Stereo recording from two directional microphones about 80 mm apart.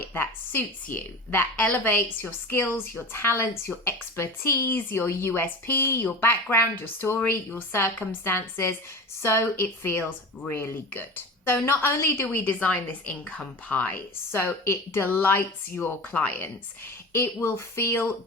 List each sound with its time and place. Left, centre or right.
0.1 s speech: left
14.3 s speech: left